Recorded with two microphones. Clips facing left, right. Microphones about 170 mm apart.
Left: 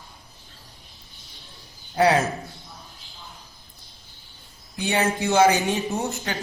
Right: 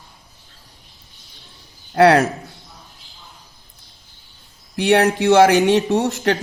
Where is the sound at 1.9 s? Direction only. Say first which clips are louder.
Right 6 dB; 85° right.